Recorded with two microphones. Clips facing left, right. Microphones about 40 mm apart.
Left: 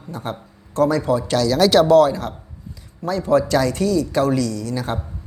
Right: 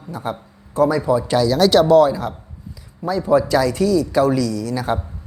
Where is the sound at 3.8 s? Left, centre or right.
Centre.